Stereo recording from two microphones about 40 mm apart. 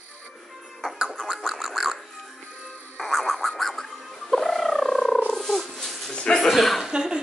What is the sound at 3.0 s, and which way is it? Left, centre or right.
Music, centre.